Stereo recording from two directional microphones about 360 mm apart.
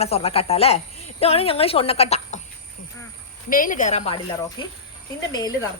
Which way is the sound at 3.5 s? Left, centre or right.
Left.